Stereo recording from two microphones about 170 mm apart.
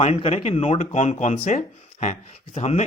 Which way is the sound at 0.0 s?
35° left (ahead or behind).